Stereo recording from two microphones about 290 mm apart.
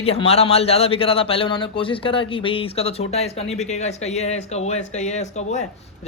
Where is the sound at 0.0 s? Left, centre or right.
Left.